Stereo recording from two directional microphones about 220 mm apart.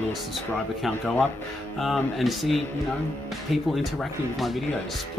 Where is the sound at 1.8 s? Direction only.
Centre (ahead or behind).